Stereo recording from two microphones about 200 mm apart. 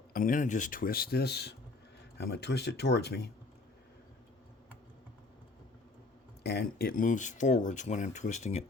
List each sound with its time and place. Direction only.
0.1 s speech: 40° left (ahead or behind)
6.4 s speech: 55° left (ahead or behind); by 8.7 s 35° left (ahead or behind)